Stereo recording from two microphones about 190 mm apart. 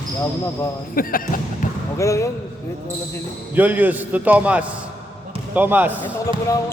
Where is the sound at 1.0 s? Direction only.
50° left (ahead or behind).